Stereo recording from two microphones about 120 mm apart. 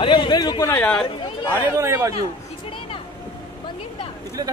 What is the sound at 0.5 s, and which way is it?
Speech, 25° left (ahead or behind).